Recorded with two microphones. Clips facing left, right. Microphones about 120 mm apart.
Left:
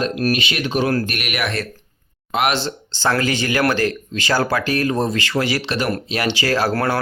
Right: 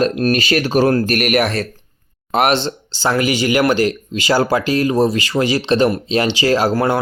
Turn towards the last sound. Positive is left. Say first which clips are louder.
# right 4 dB
turn(degrees=-15)  # may be behind; listen again after turning